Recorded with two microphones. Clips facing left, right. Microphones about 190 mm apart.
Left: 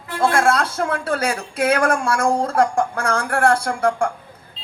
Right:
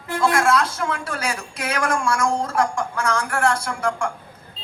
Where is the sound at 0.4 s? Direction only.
55° left (ahead or behind).